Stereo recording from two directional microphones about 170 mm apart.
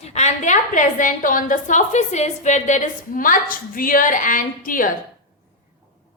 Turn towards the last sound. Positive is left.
turn(degrees=50)  # may be behind; listen again after turning